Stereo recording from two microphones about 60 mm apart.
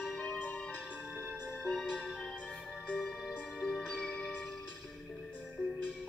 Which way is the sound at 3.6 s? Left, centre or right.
Centre.